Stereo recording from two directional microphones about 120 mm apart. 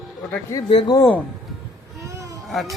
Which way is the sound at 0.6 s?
50° left (ahead or behind).